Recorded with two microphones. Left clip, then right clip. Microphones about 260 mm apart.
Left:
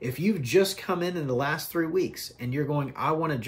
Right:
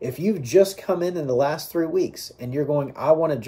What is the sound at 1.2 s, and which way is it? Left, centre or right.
Speech, left.